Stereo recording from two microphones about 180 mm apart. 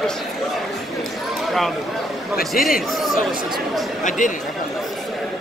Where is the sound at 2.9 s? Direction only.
Centre (ahead or behind).